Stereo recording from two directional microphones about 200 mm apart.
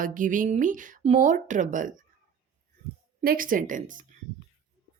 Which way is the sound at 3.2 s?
45° right (ahead or behind).